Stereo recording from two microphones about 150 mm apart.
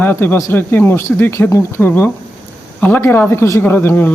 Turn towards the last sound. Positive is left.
turn(degrees=10)  # may be behind; listen again after turning